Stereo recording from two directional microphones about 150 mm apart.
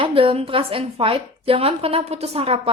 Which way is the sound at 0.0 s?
35° right (ahead or behind).